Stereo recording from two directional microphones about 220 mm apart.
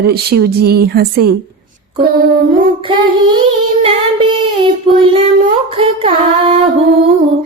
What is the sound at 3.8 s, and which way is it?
Child singing, 25° right (ahead or behind).